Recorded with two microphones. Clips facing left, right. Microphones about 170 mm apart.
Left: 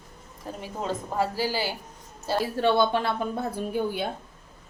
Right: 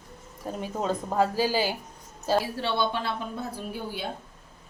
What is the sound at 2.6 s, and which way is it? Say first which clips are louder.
Speech: left 6 dB; 50° left (ahead or behind).